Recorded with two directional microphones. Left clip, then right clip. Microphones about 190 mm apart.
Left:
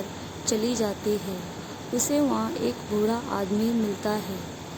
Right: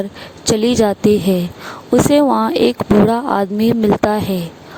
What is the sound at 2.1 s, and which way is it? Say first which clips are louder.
Speech: right 11 dB; 50° right (ahead or behind).